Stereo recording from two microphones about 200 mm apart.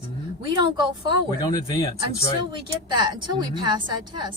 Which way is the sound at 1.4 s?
25° left (ahead or behind).